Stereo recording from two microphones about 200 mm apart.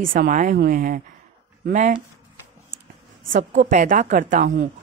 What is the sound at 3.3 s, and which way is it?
Speech, 40° right (ahead or behind).